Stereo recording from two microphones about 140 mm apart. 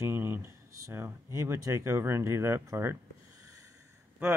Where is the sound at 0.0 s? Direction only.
15° right (ahead or behind).